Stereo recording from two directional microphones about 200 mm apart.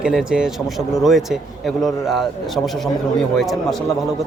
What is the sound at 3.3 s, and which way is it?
Speech, centre (ahead or behind).